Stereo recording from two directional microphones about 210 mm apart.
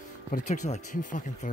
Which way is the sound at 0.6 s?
35° left (ahead or behind).